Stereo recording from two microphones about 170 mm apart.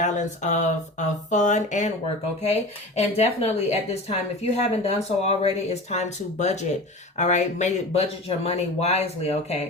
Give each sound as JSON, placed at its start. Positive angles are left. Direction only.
{"t": 0.0, "sound": "speech", "side_deg": 45}